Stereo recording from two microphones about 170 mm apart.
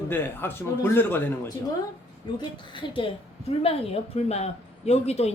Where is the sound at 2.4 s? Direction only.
30° left (ahead or behind).